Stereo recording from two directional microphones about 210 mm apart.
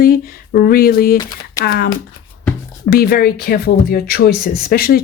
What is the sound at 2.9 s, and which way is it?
Speech, 45° left (ahead or behind).